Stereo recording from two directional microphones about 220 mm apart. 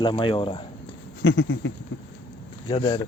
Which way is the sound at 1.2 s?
60° left (ahead or behind).